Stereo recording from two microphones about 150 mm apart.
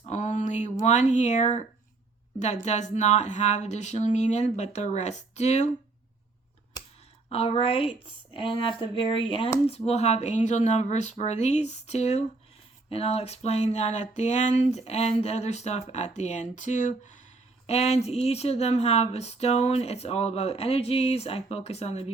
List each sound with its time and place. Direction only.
0.0 s speech: 50° left (ahead or behind)
7.3 s a woman's voice: 40° left (ahead or behind)